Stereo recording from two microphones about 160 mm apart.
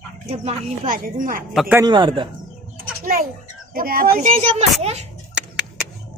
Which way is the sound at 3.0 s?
65° right (ahead or behind).